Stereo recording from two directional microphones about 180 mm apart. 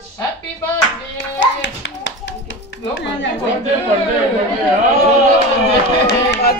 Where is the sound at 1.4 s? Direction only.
90° left.